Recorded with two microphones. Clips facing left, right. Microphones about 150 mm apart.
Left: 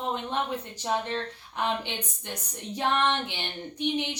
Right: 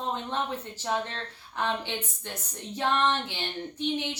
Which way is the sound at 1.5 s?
15° left (ahead or behind).